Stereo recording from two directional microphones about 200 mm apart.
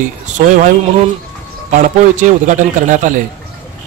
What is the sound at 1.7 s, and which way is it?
A man's voice, 40° right (ahead or behind).